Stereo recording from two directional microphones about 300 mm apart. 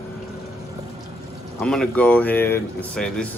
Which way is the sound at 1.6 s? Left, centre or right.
Centre.